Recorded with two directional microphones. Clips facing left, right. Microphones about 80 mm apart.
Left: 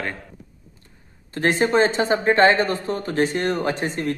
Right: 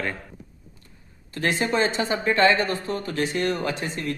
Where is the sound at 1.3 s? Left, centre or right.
Left.